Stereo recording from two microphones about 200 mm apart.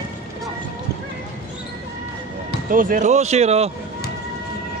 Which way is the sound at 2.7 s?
45° right (ahead or behind).